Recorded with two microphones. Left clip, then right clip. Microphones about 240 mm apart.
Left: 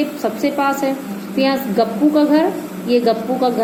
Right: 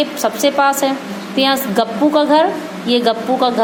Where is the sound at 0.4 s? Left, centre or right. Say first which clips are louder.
Right 4 dB; right.